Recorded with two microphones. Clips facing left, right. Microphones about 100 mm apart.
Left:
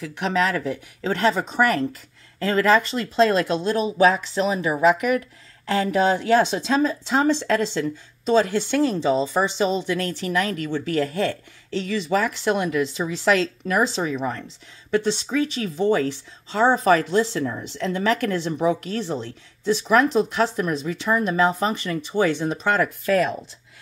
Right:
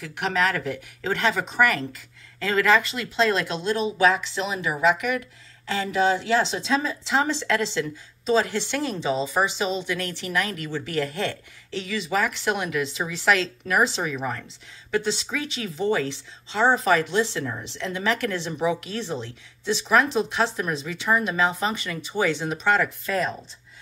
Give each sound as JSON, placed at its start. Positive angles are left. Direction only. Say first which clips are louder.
{"t": 1.1, "sound": "speech", "louder": "left 3 dB", "side_deg": 35}
{"t": 23.0, "sound": "speech", "louder": "left 6 dB", "side_deg": 65}